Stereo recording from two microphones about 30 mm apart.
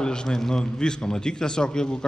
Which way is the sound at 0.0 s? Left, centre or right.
Left.